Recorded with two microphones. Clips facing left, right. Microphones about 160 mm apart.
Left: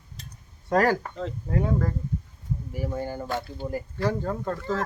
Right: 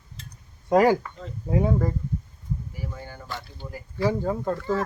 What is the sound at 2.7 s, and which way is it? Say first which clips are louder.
Speech: left 8 dB; 50° left (ahead or behind).